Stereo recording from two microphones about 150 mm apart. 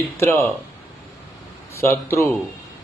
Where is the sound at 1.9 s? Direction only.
15° left (ahead or behind).